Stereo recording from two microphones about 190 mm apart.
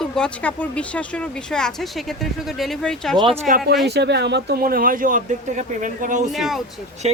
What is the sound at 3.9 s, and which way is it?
Speech, 60° right (ahead or behind).